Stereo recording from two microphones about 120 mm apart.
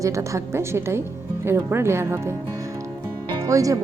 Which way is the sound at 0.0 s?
25° right (ahead or behind).